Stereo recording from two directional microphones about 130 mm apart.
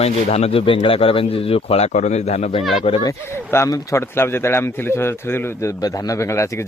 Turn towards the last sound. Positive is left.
turn(degrees=20)  # may be behind; listen again after turning